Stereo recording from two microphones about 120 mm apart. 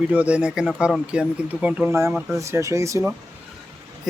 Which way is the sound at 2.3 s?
25° right (ahead or behind).